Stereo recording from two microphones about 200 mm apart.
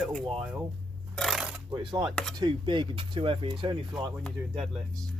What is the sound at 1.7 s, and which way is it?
Speech, 25° right (ahead or behind).